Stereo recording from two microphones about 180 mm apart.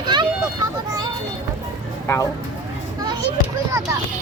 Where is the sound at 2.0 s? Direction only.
15° left (ahead or behind).